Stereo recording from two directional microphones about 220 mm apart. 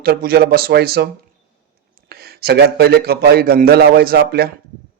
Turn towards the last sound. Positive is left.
turn(degrees=-45)  # may be behind; listen again after turning